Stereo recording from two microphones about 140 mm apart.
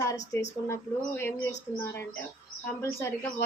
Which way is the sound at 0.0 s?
20° left (ahead or behind).